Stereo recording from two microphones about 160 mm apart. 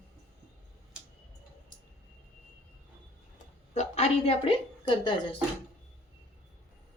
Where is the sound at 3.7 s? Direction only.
40° left (ahead or behind).